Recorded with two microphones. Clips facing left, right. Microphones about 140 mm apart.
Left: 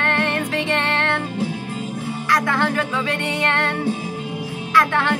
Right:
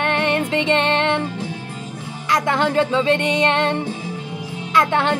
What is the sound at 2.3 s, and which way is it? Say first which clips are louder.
Music: right 2 dB; 20° right (ahead or behind).